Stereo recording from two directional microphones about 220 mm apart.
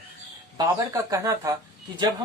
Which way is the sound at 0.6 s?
15° right (ahead or behind).